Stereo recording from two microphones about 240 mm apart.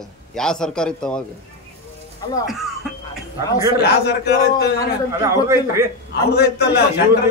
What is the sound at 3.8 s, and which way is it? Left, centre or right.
Speech, left.